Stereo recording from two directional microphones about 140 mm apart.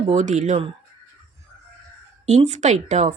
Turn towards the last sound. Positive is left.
turn(degrees=-55)  # may be behind; listen again after turning